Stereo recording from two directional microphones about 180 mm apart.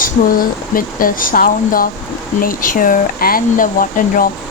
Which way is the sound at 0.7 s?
50° left (ahead or behind).